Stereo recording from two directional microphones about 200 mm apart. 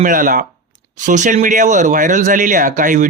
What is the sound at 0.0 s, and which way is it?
Speech, 45° right (ahead or behind).